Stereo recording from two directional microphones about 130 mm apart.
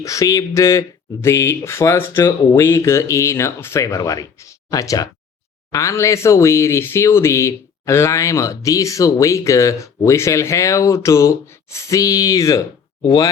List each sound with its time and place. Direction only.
0.0 s speech: 25° left (ahead or behind)